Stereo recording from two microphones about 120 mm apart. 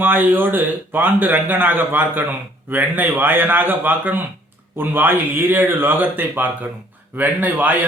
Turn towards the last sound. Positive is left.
turn(degrees=-15)  # may be behind; listen again after turning